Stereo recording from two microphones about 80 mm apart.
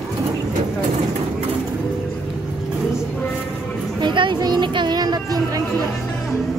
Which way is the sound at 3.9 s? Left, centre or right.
Right.